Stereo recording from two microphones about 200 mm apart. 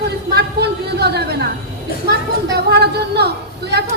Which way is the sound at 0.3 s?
55° right (ahead or behind).